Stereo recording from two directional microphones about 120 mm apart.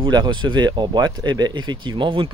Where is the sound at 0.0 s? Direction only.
40° right (ahead or behind).